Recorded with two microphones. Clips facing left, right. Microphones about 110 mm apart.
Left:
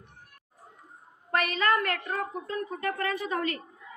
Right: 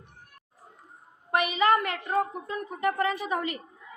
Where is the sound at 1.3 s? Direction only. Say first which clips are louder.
Right 3 dB; 15° right (ahead or behind).